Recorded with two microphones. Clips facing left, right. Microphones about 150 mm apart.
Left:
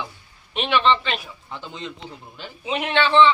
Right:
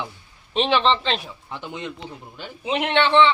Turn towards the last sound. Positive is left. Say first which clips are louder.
# even
turn(degrees=-20)  # may be behind; listen again after turning